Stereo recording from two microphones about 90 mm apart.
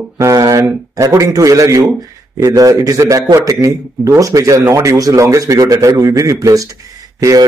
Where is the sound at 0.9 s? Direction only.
40° right (ahead or behind).